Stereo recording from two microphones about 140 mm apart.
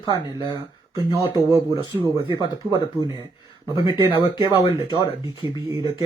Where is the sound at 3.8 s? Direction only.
35° left (ahead or behind).